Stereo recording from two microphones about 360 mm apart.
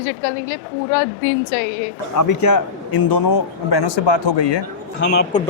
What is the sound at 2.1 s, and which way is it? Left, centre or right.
Speech, left.